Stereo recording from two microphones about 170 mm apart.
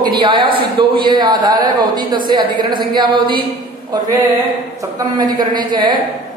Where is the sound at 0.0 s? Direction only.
25° right (ahead or behind).